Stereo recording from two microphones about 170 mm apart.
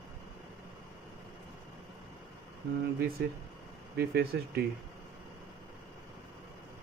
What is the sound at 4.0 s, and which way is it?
Speech, 70° right (ahead or behind).